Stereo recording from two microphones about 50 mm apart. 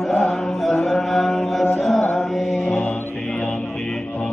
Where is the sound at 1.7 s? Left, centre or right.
Centre.